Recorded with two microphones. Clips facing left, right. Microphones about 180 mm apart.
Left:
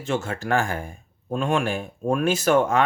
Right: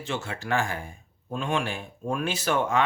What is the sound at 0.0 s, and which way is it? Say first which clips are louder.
Speech: left 6 dB; 45° left (ahead or behind).